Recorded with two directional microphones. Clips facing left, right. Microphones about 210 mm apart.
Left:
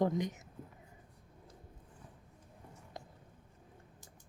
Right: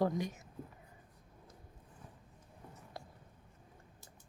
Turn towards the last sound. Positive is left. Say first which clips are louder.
# even
turn(degrees=20)  # may be behind; listen again after turning